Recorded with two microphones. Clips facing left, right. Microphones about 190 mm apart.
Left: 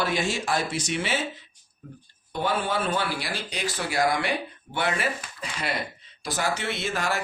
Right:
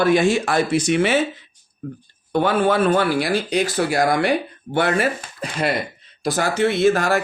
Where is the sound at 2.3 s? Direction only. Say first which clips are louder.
Right 9 dB; 60° right (ahead or behind).